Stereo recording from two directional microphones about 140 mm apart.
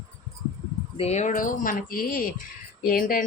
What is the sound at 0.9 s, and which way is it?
Speech, 50° left (ahead or behind).